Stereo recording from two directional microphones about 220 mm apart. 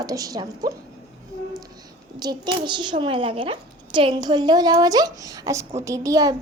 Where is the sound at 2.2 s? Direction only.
20° right (ahead or behind).